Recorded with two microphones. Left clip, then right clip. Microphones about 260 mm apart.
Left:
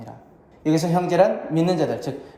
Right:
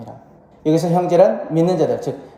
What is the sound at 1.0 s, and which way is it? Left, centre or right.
A woman's voice, centre.